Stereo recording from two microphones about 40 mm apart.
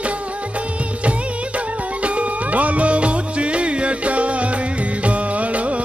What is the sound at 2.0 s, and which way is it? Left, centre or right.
Music, right.